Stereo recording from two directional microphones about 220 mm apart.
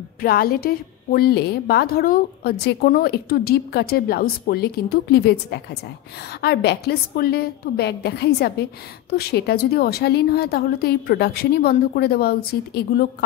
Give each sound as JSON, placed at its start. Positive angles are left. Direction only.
{"t": 0.2, "sound": "a woman's voice", "side_deg": 45}